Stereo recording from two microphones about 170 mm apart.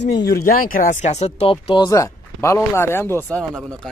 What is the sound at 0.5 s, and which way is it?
Speech, 55° left (ahead or behind).